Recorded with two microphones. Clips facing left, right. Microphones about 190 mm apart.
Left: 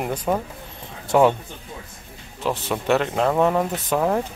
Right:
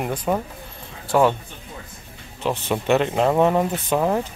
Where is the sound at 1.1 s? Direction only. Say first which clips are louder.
Left 1 dB; 15° left (ahead or behind).